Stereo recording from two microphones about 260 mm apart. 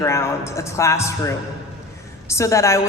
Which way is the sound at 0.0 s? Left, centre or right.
Centre.